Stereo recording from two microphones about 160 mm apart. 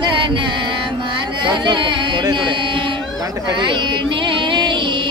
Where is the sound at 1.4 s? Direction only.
30° right (ahead or behind).